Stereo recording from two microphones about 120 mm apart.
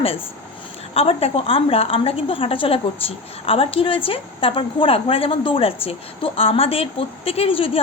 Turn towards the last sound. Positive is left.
turn(degrees=50)  # may be behind; listen again after turning